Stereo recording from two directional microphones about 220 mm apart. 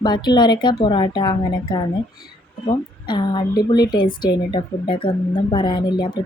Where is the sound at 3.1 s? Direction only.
20° left (ahead or behind).